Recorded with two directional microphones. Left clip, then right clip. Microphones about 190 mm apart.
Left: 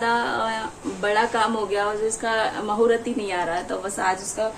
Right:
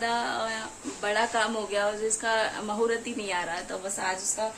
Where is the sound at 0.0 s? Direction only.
5° right (ahead or behind).